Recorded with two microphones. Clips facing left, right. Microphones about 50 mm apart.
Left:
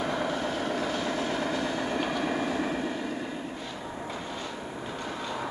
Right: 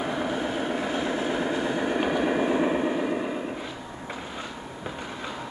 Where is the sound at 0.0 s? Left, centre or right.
Centre.